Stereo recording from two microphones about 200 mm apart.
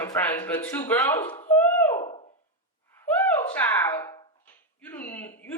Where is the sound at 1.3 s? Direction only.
30° left (ahead or behind).